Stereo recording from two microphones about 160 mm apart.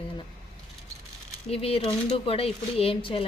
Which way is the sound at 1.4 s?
40° left (ahead or behind).